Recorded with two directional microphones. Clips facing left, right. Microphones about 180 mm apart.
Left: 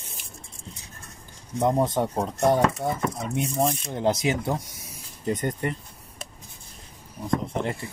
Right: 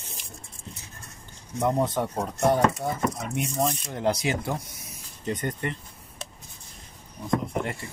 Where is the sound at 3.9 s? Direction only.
25° left (ahead or behind).